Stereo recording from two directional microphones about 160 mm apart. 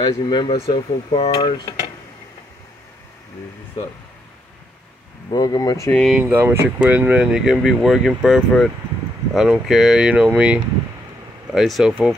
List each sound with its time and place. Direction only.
0.0 s speech: 30° left (ahead or behind)
1.3 s speech: 25° left (ahead or behind)
5.3 s speech: 25° left (ahead or behind)
5.9 s speech: 5° left (ahead or behind)
6.1 s speech: 15° right (ahead or behind)